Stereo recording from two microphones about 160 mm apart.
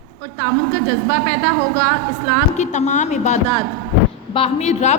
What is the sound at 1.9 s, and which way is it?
A woman's voice, 45° left (ahead or behind).